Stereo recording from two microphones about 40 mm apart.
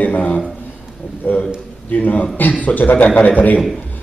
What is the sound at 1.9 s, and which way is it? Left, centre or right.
A man's voice, left.